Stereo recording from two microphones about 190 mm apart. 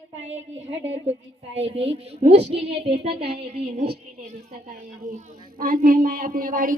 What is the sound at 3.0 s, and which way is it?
Speech, 30° right (ahead or behind).